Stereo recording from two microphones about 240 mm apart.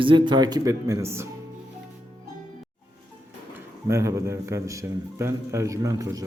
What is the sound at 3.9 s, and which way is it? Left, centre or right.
A man's voice, centre.